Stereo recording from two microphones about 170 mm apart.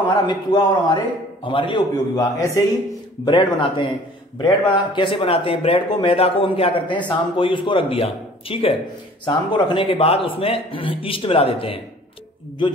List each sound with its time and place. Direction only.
0.1 s a man's voice: 25° left (ahead or behind)
3.3 s a man's voice: 30° left (ahead or behind)